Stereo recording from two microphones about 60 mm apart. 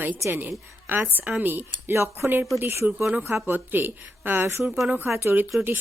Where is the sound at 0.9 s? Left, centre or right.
Right.